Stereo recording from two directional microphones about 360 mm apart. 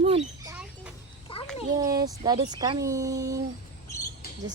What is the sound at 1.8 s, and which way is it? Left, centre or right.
Speech, centre.